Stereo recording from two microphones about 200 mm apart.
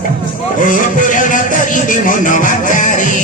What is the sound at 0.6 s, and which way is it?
Music, 40° left (ahead or behind).